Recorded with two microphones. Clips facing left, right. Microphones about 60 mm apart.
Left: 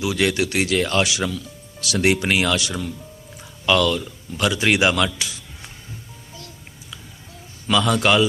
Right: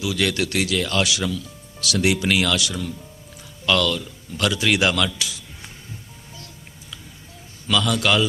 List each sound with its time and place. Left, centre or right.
0.0 s speech: left
0.6 s speech: left
3.7 s speech: centre
7.7 s speech: left